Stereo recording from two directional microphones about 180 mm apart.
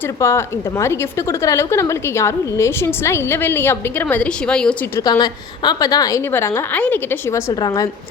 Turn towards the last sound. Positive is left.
turn(degrees=20)  # may be behind; listen again after turning